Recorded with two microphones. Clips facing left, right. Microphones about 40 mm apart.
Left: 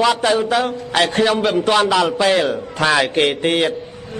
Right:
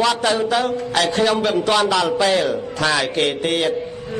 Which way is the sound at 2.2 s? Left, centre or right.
Left.